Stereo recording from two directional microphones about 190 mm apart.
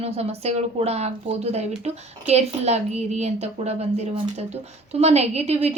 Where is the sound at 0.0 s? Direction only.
35° right (ahead or behind).